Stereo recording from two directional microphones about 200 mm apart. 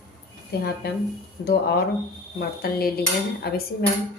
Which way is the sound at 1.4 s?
50° left (ahead or behind).